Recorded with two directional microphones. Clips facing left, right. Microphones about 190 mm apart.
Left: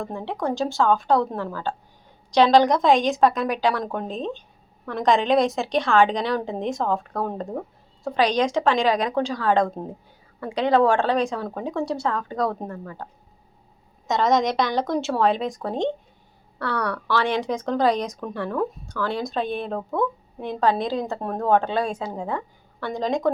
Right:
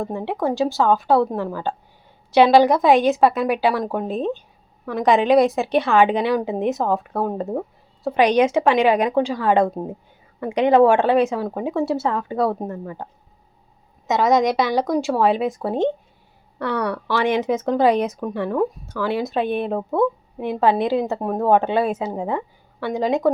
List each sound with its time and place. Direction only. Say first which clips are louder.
0.0 s speech: right 5 dB; 20° right (ahead or behind)
0.3 s a woman's voice: right 3 dB; 5° right (ahead or behind)
1.5 s a woman's voice: right 3 dB; 15° right (ahead or behind)
12.5 s speech: right 4 dB; 20° right (ahead or behind)
14.1 s a woman's voice: right 3 dB; centre (ahead or behind)